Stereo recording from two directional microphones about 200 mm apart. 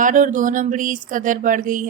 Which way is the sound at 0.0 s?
40° right (ahead or behind).